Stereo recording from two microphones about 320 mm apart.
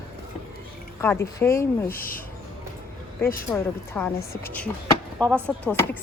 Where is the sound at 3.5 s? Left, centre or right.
Centre.